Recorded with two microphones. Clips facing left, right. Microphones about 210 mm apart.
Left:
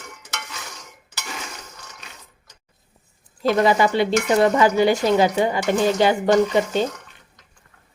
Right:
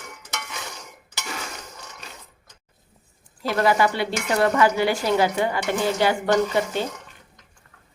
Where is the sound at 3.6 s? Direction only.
20° left (ahead or behind).